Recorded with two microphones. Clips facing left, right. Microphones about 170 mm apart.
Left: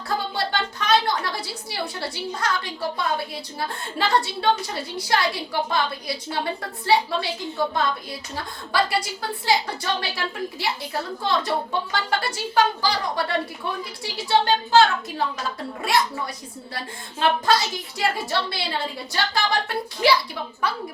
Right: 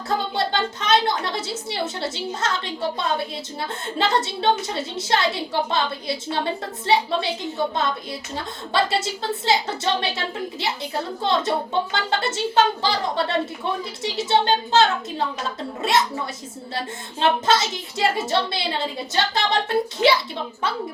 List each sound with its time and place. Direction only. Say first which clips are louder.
0.3 s a woman's voice: right 3 dB; 20° right (ahead or behind)
3.9 s a woman's voice: right 1 dB; 20° right (ahead or behind)
8.4 s a woman's voice: right 1 dB; 25° right (ahead or behind)